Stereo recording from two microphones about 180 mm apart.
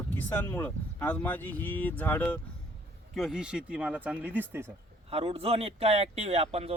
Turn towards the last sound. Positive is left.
turn(degrees=-35)  # may be behind; listen again after turning